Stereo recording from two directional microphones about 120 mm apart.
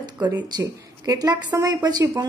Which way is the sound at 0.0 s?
35° right (ahead or behind).